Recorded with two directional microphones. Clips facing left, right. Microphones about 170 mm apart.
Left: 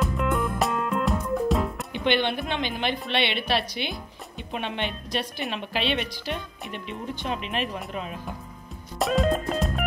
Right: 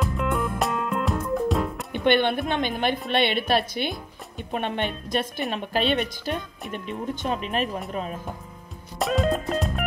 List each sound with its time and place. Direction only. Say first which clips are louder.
0.0 s music: even; centre (ahead or behind)
1.9 s speech: right 5 dB; 50° right (ahead or behind)
8.9 s music: even; centre (ahead or behind)